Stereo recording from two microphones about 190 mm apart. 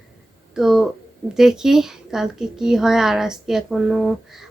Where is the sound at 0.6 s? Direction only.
Centre (ahead or behind).